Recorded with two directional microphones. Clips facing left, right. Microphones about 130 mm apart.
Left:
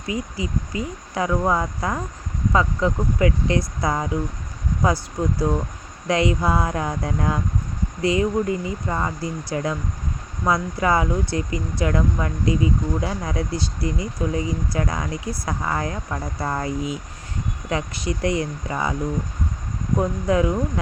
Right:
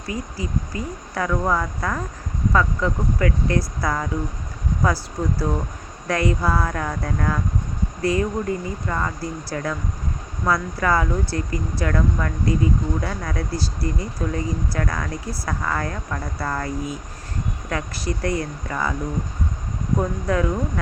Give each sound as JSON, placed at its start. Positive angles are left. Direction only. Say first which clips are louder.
{"t": 0.1, "sound": "speech", "louder": "left 1 dB", "side_deg": 15}
{"t": 5.2, "sound": "speech", "louder": "left 2 dB", "side_deg": 15}
{"t": 20.0, "sound": "speech", "louder": "left 3 dB", "side_deg": 15}